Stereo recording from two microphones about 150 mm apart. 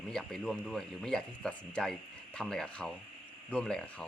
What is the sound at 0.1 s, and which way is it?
A man's voice, 5° left (ahead or behind).